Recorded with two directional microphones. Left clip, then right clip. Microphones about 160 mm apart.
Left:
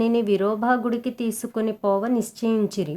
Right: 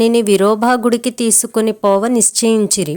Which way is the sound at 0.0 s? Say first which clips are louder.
Right 9 dB; 40° right (ahead or behind).